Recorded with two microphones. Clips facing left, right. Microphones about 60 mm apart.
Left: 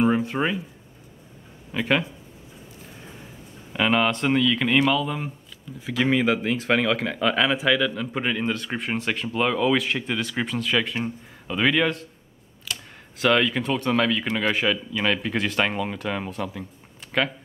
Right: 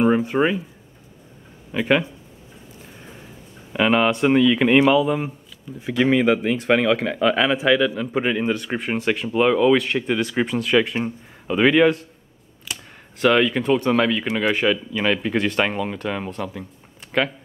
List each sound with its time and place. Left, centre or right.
0.0 s speech: centre
1.7 s speech: centre
3.7 s speech: centre
12.7 s computer keyboard: centre
13.2 s speech: centre